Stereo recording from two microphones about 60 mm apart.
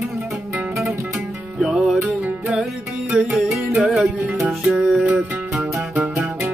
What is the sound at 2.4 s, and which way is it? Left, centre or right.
Music, centre.